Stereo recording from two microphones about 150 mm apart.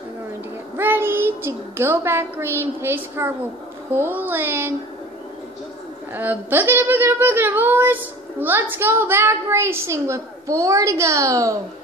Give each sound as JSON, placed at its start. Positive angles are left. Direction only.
{"t": 0.7, "sound": "a child's voice", "side_deg": -15}
{"t": 6.1, "sound": "speech", "side_deg": -15}